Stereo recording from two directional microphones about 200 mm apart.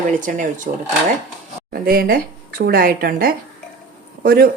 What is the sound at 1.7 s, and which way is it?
A woman's voice, 50° right (ahead or behind).